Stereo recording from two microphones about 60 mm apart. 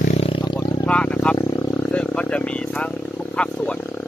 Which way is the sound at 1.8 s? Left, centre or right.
Left.